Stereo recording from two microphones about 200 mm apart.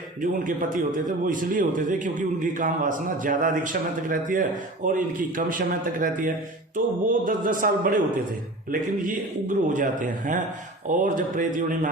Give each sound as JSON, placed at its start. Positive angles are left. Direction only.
{"t": 0.2, "sound": "a man's voice", "side_deg": -40}